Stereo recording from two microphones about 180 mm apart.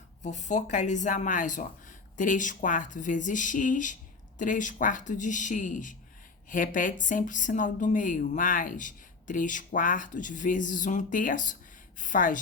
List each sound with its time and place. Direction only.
0.2 s speech: 40° left (ahead or behind)